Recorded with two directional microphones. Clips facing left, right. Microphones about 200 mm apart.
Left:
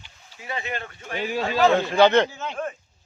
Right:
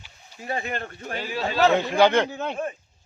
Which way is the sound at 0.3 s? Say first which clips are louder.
Right 2 dB; 45° right (ahead or behind).